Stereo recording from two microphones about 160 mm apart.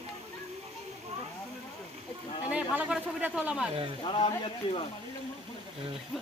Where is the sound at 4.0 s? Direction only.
35° left (ahead or behind).